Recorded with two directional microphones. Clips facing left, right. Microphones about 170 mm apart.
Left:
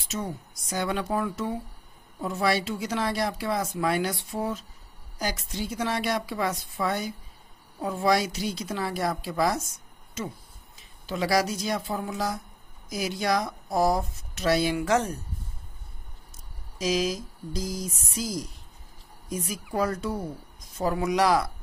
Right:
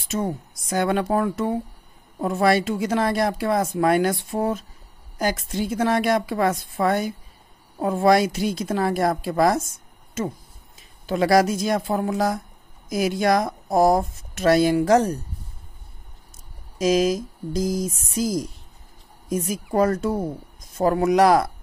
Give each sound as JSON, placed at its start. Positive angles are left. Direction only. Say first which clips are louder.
{"t": 0.1, "sound": "speech", "louder": "right 7 dB", "side_deg": -55}
{"t": 16.7, "sound": "speech", "louder": "right 7 dB", "side_deg": -50}